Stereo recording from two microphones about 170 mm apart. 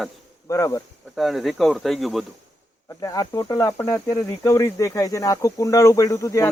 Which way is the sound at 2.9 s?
20° left (ahead or behind).